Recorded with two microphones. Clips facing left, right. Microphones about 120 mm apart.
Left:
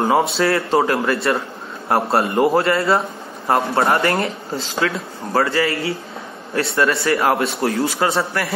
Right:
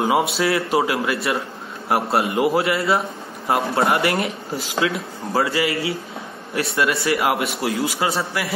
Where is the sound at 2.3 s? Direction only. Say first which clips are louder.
Left 4 dB; 45° left (ahead or behind).